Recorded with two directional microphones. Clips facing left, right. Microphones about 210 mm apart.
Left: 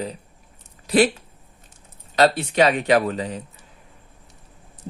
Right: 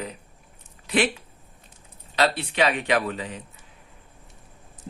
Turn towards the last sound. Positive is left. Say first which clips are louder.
# left 6 dB
turn(degrees=40)  # may be behind; listen again after turning